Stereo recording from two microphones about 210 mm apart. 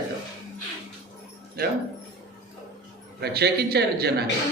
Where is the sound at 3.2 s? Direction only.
50° right (ahead or behind).